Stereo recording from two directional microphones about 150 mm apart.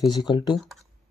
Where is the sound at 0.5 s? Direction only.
Centre (ahead or behind).